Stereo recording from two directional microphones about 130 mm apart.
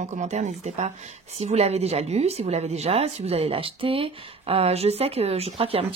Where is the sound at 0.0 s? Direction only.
65° right (ahead or behind).